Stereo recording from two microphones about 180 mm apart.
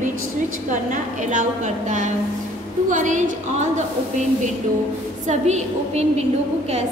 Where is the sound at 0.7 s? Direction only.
45° right (ahead or behind).